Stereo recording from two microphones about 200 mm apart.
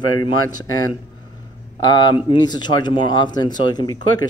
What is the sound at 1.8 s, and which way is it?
Speech, 20° left (ahead or behind).